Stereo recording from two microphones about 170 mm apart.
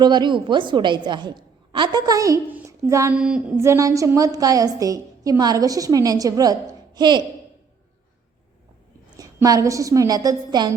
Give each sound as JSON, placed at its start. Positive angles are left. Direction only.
{"t": 0.0, "sound": "a woman's voice", "side_deg": -25}
{"t": 3.2, "sound": "a sound", "side_deg": -5}
{"t": 3.6, "sound": "a woman's voice", "side_deg": -20}
{"t": 9.0, "sound": "a woman's voice", "side_deg": -20}